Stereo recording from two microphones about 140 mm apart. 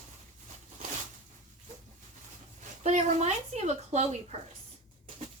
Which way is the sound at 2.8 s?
55° right (ahead or behind).